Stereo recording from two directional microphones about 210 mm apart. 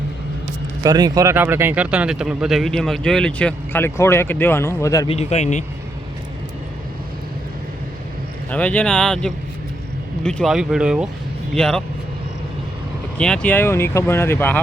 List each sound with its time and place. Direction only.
0.8 s speech: 20° right (ahead or behind); by 5.1 s 15° left (ahead or behind)
5.1 s speech: 30° left (ahead or behind)
8.4 s speech: 5° left (ahead or behind)
13.1 s speech: 5° left (ahead or behind)